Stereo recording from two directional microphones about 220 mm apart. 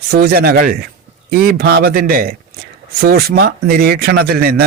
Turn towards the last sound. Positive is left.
turn(degrees=-45)  # may be behind; listen again after turning